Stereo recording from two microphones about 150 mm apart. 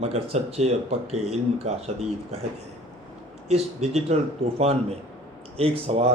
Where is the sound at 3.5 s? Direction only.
45° right (ahead or behind).